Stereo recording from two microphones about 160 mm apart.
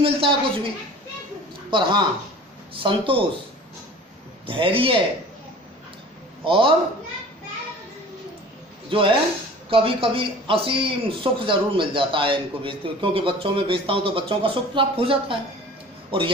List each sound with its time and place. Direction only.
0.0 s speech: 35° right (ahead or behind)
1.7 s speech: 30° right (ahead or behind)
4.4 s speech: 35° right (ahead or behind)
6.4 s a man's voice: 35° right (ahead or behind)
8.9 s speech: 35° right (ahead or behind)